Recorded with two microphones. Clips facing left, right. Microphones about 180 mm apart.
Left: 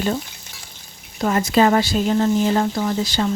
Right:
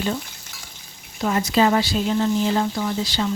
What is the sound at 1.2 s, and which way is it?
A woman's voice, 50° left (ahead or behind).